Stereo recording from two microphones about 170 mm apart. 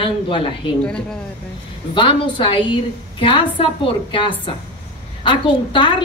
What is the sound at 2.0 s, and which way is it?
A woman's voice, 30° left (ahead or behind).